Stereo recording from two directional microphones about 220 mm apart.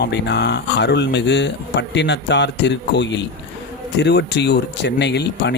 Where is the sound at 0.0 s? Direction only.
50° left (ahead or behind).